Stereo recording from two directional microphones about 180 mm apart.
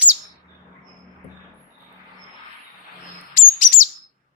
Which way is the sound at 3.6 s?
45° left (ahead or behind).